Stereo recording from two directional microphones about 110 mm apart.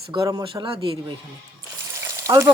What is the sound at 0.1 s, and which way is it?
Speech, 35° right (ahead or behind).